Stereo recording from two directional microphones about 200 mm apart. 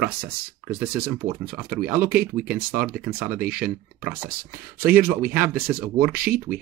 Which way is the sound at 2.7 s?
10° right (ahead or behind).